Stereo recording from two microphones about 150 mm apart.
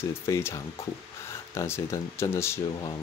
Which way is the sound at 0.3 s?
15° left (ahead or behind).